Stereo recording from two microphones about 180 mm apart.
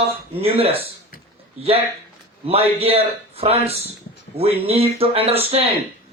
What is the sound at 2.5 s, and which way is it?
A man's voice, 35° right (ahead or behind).